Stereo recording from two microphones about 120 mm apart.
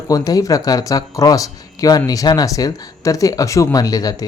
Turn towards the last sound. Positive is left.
turn(degrees=30)  # may be behind; listen again after turning